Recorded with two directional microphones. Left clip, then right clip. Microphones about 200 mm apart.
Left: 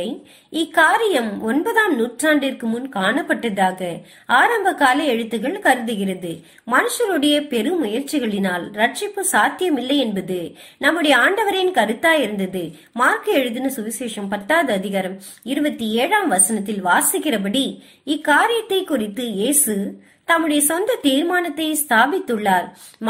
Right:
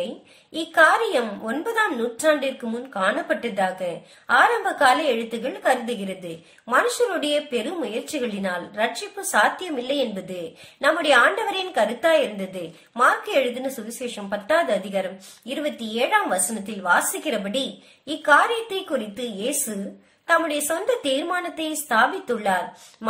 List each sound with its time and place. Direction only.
0.5 s a woman's voice: 20° left (ahead or behind)